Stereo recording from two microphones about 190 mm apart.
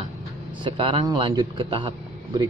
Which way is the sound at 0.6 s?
25° right (ahead or behind).